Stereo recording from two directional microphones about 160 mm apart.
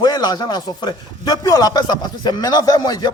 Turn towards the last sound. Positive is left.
turn(degrees=25)  # may be behind; listen again after turning